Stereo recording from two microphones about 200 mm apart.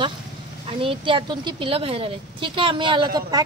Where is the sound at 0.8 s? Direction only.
25° right (ahead or behind).